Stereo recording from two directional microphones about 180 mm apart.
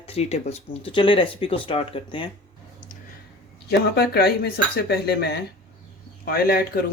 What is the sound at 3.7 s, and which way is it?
Speech, 65° left (ahead or behind).